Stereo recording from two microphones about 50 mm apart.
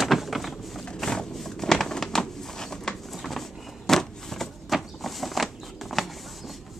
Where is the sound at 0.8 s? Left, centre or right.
Centre.